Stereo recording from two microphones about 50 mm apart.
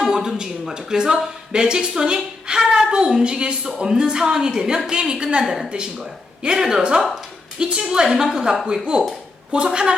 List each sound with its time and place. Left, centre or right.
0.1 s speech: centre